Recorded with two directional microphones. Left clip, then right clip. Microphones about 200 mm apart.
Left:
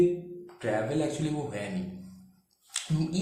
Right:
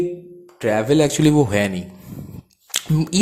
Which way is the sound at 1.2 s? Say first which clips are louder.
Right 17 dB; 50° right (ahead or behind).